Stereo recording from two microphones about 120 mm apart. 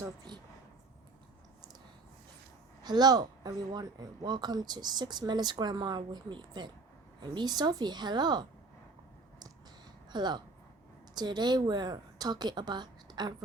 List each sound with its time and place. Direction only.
0.3 s a sound: 35° right (ahead or behind)
2.8 s speech: 35° right (ahead or behind)
10.1 s a woman's voice: 40° right (ahead or behind)